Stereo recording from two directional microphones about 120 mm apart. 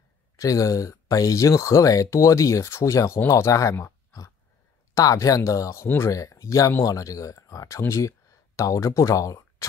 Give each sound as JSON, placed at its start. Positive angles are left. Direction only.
{"t": 0.4, "sound": "speech", "side_deg": 30}